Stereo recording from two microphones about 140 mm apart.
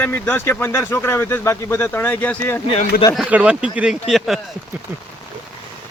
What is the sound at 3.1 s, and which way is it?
Speech, 5° right (ahead or behind).